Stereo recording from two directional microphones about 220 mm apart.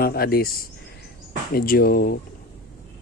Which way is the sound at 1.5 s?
40° left (ahead or behind).